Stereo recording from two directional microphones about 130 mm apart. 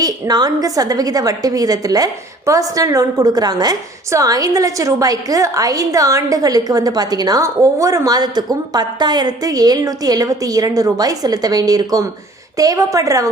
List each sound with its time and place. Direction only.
0.0 s a woman's voice: 30° right (ahead or behind)